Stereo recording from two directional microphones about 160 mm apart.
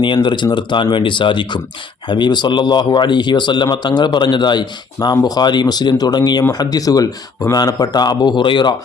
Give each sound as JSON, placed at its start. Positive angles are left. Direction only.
{"t": 0.0, "sound": "speech", "side_deg": 30}